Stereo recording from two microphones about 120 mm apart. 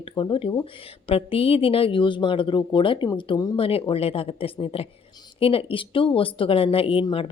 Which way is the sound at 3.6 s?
50° left (ahead or behind).